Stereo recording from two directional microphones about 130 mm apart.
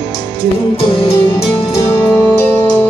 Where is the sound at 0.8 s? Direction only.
45° left (ahead or behind).